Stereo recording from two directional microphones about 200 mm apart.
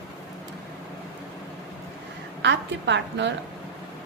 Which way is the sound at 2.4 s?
60° right (ahead or behind).